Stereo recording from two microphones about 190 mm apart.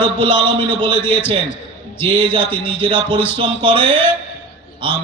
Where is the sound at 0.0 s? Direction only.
25° right (ahead or behind).